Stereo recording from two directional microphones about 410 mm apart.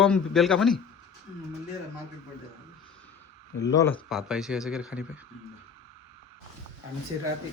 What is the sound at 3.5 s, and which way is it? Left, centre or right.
Speech, left.